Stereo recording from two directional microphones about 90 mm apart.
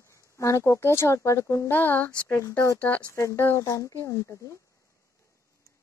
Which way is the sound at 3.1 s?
30° left (ahead or behind).